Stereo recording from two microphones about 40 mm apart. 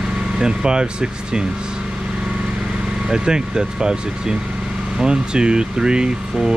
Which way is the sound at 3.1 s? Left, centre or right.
Centre.